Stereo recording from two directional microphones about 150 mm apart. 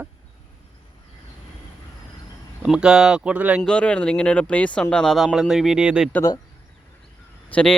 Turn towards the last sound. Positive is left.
turn(degrees=5)  # may be behind; listen again after turning